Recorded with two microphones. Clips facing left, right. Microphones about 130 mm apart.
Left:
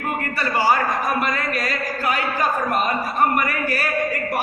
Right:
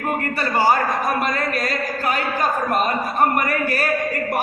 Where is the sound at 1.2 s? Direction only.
40° right (ahead or behind).